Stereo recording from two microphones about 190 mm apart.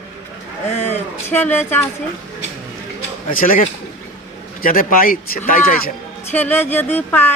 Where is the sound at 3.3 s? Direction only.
45° left (ahead or behind).